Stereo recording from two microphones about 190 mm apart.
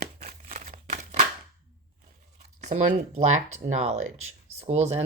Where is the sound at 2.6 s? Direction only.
40° right (ahead or behind).